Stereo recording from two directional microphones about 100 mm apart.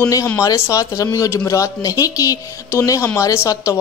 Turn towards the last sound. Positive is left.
turn(degrees=30)  # may be behind; listen again after turning